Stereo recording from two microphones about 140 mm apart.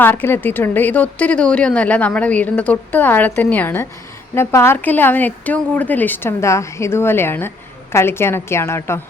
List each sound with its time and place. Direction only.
0.0 s a woman's voice: 15° left (ahead or behind)